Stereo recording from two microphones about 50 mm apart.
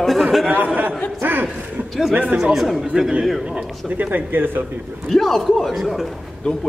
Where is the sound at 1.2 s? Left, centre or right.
Right.